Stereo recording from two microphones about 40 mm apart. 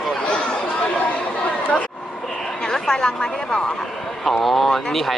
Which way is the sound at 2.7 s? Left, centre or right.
Centre.